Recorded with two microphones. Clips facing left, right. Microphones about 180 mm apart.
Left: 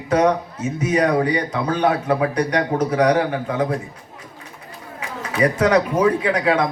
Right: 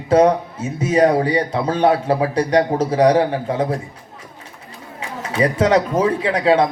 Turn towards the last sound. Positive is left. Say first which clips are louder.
# right 3 dB
turn(degrees=-30)  # may be behind; listen again after turning